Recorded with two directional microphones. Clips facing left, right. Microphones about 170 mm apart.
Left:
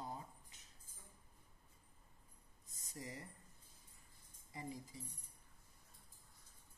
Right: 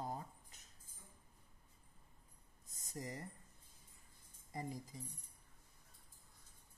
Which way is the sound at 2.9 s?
45° right (ahead or behind).